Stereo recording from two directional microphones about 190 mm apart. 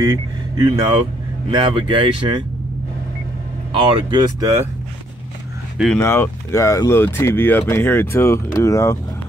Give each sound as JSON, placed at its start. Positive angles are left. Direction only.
{"t": 0.0, "sound": "speech", "side_deg": -20}
{"t": 3.7, "sound": "speech", "side_deg": -20}
{"t": 5.9, "sound": "speech", "side_deg": 10}